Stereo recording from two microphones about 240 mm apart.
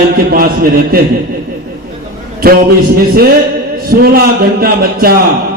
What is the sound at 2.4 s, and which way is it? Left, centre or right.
Speech, right.